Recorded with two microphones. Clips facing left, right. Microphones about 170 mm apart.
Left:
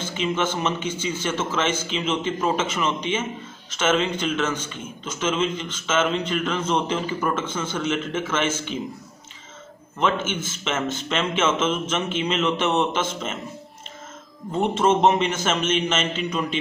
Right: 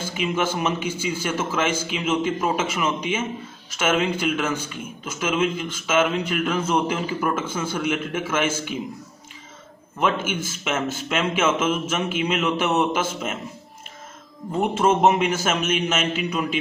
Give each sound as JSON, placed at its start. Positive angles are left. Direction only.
{"t": 0.0, "sound": "a man's voice", "side_deg": -10}
{"t": 9.9, "sound": "a man's voice", "side_deg": -10}
{"t": 14.5, "sound": "a man's voice", "side_deg": -10}